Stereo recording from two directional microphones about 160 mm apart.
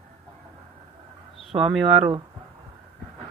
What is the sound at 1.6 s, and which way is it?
Speech, 5° right (ahead or behind).